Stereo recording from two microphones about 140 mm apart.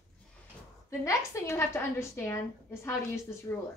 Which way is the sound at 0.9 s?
20° left (ahead or behind).